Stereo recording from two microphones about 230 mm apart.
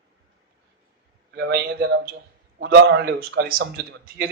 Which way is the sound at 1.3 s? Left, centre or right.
Right.